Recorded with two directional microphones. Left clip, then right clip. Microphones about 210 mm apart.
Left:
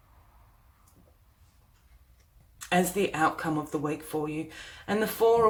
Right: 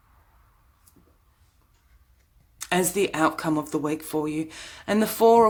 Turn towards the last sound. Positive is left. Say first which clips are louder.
# right 5 dB
turn(degrees=-50)  # may be behind; listen again after turning